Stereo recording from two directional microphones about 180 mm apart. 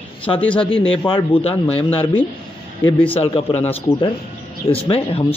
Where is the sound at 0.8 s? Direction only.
30° left (ahead or behind).